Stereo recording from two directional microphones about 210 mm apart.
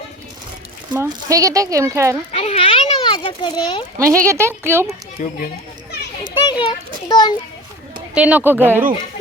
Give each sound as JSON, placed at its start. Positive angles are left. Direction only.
{"t": 0.9, "sound": "speech", "side_deg": -15}
{"t": 2.3, "sound": "a child's voice", "side_deg": 30}
{"t": 3.9, "sound": "speech", "side_deg": -15}
{"t": 5.2, "sound": "speech", "side_deg": 35}
{"t": 6.4, "sound": "a child's voice", "side_deg": 20}
{"t": 8.1, "sound": "speech", "side_deg": -5}